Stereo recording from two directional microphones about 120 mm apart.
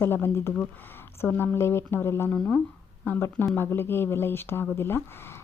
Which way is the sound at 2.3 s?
10° left (ahead or behind).